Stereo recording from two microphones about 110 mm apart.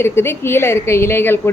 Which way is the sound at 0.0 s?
20° left (ahead or behind).